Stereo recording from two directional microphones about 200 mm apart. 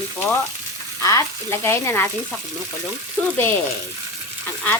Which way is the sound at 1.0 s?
15° left (ahead or behind).